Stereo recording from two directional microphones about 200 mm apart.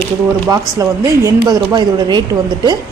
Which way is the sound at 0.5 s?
20° right (ahead or behind).